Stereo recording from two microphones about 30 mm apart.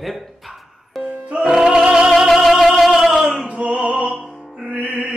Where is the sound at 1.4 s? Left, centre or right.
Centre.